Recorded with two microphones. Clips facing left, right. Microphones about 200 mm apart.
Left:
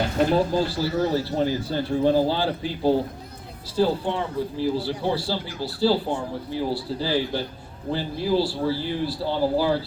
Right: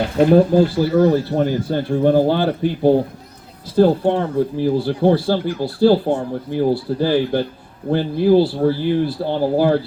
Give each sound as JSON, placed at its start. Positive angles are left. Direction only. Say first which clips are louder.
{"t": 0.3, "sound": "speech", "louder": "right 9 dB", "side_deg": -55}